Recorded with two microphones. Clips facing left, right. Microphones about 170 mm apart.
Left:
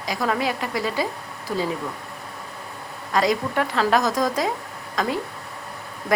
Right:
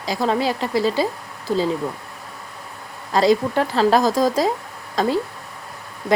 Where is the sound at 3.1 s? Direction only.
30° right (ahead or behind).